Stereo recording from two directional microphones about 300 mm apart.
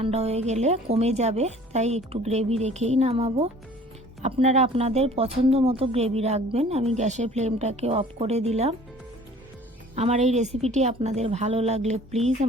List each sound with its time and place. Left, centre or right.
0.0 s speech: right
9.9 s speech: right